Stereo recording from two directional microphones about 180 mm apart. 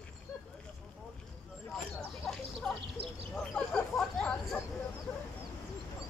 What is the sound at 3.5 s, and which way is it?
Chatter, 5° left (ahead or behind).